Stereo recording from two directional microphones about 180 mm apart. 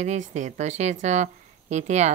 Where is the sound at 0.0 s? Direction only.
40° right (ahead or behind).